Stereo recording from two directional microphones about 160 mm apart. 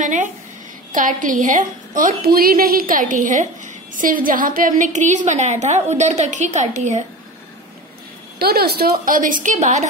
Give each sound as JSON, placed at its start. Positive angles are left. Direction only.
{"t": 0.0, "sound": "a woman's voice", "side_deg": -50}
{"t": 8.4, "sound": "a woman's voice", "side_deg": -80}